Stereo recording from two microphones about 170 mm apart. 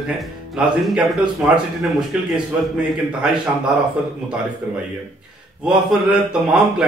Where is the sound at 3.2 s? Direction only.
5° right (ahead or behind).